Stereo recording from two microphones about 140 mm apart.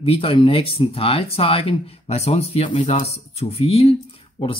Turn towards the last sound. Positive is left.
turn(degrees=45)  # may be behind; listen again after turning